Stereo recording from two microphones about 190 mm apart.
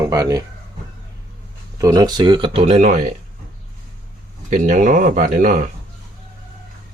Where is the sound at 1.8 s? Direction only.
20° right (ahead or behind); by 3.0 s 40° right (ahead or behind).